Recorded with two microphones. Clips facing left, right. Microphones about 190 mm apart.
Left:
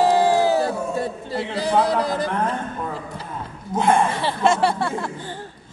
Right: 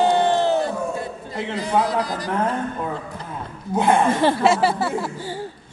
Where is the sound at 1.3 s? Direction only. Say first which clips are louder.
Left 1 dB; 35° left (ahead or behind).